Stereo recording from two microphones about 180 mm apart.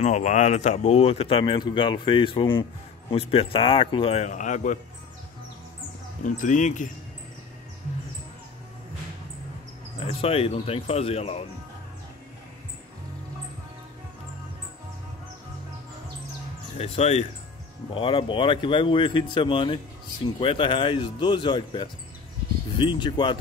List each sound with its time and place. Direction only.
0.0 s speech: 40° left (ahead or behind)
6.2 s speech: 45° left (ahead or behind)
9.9 s speech: 35° left (ahead or behind)
16.7 s speech: 35° left (ahead or behind)